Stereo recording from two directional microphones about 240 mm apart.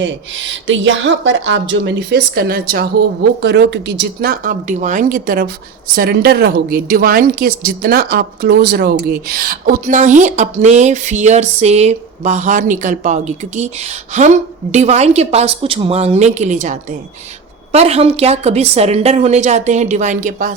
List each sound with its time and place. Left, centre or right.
0.0 s a woman's voice: right